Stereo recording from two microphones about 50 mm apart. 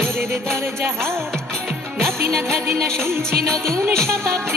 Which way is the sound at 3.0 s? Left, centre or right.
Right.